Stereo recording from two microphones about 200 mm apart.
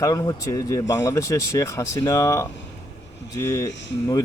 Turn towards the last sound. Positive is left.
turn(degrees=15)  # may be behind; listen again after turning